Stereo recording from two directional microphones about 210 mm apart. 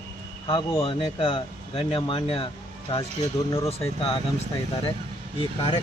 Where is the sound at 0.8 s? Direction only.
25° left (ahead or behind).